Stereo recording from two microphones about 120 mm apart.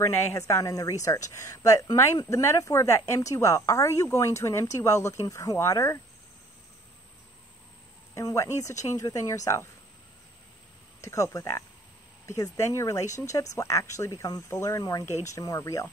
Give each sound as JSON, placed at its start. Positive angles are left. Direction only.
{"t": 0.0, "sound": "a woman's voice", "side_deg": 25}
{"t": 8.1, "sound": "a woman's voice", "side_deg": 30}
{"t": 11.0, "sound": "a woman's voice", "side_deg": 25}